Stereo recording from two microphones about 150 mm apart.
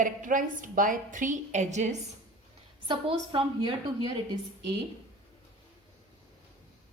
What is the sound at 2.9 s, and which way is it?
A woman's voice, 35° right (ahead or behind).